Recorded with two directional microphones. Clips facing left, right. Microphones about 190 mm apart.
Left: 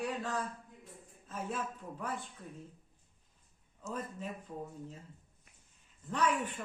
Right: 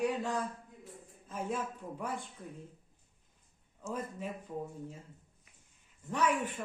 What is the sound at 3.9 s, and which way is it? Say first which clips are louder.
Speech: right 2 dB; 10° right (ahead or behind).